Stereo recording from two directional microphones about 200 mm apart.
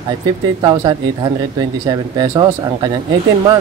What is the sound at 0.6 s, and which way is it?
Speech, 20° right (ahead or behind).